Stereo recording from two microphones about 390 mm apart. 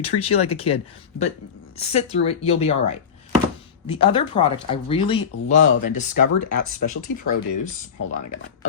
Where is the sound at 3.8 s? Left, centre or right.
Centre.